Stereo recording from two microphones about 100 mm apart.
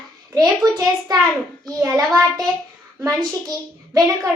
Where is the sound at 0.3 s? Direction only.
40° right (ahead or behind).